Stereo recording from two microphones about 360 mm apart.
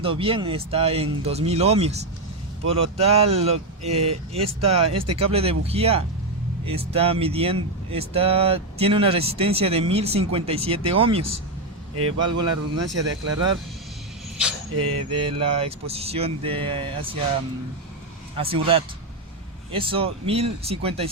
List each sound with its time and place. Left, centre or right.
0.0 s speech: centre
11.9 s speech: right
15.2 s speech: centre
18.3 s speech: centre